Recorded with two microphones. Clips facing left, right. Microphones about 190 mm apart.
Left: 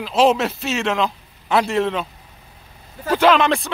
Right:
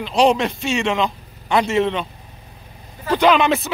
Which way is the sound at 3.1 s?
Centre (ahead or behind).